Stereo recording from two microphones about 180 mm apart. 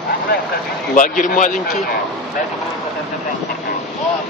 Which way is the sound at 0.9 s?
45° left (ahead or behind).